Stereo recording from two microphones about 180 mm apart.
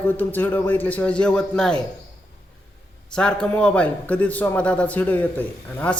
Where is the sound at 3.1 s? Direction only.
5° left (ahead or behind).